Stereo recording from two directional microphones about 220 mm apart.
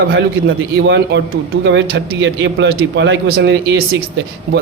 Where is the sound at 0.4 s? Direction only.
50° right (ahead or behind).